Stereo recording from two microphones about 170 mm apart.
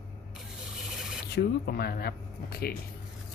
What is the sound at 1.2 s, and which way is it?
Speech, 70° left (ahead or behind).